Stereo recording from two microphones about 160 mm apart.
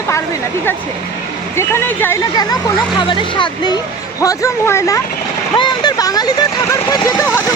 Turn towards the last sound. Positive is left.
turn(degrees=20)  # may be behind; listen again after turning